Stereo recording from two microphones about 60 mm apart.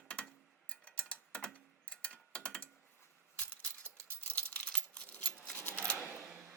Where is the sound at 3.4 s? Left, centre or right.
Left.